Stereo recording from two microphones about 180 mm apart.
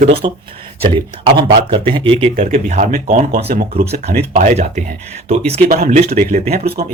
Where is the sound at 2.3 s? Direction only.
45° right (ahead or behind).